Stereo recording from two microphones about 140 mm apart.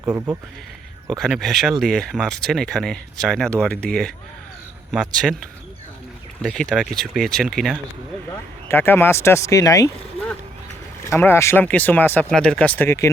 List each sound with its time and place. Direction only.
0.0 s speech: 15° right (ahead or behind)
1.1 s speech: centre (ahead or behind)
8.3 s speech: 15° left (ahead or behind)
11.0 s speech: 20° left (ahead or behind)